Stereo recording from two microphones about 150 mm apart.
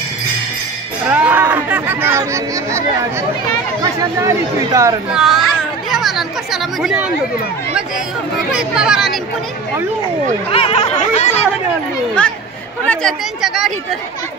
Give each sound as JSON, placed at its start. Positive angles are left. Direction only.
{"t": 1.0, "sound": "speech", "side_deg": -10}
{"t": 5.1, "sound": "speech", "side_deg": 0}
{"t": 8.5, "sound": "speech", "side_deg": -5}
{"t": 10.5, "sound": "speech", "side_deg": 40}
{"t": 12.2, "sound": "a woman's voice", "side_deg": 5}